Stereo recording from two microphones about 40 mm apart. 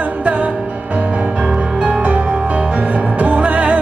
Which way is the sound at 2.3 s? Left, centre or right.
Right.